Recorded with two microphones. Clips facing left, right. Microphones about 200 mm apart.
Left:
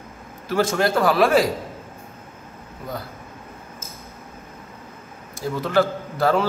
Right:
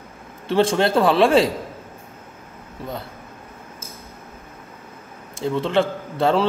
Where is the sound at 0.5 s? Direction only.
30° right (ahead or behind).